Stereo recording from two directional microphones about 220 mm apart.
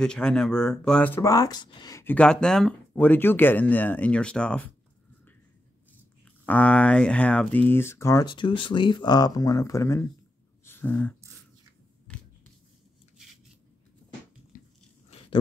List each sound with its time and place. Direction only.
0.0 s speech: 5° left (ahead or behind)
6.4 s speech: 5° left (ahead or behind)
10.6 s a sound: 10° left (ahead or behind)
15.0 s biting: 25° left (ahead or behind)